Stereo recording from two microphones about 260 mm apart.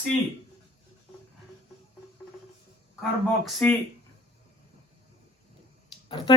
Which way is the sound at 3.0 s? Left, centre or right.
Centre.